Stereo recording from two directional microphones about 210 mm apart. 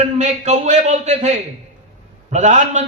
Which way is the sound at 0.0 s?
35° right (ahead or behind).